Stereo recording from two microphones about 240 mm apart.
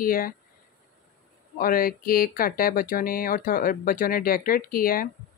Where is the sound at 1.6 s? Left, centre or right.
Left.